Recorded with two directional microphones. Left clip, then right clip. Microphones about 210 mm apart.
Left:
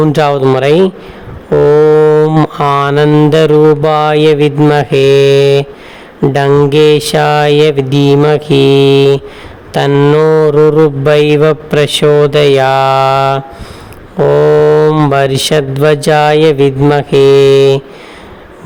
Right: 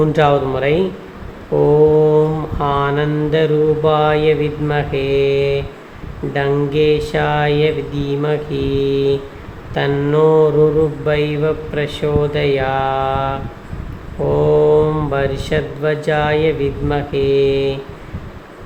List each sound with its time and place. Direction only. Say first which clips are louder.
0.0 s a man's voice: left 5 dB; 55° left (ahead or behind)
2.1 s a man's voice: left 7 dB; 50° left (ahead or behind)